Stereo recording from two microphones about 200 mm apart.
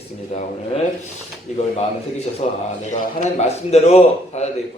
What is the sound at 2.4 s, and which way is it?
A man's voice, 35° left (ahead or behind).